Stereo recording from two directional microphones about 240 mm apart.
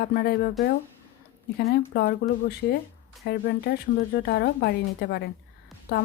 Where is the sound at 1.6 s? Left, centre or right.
Left.